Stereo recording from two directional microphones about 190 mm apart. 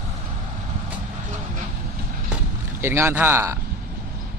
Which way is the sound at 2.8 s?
15° right (ahead or behind).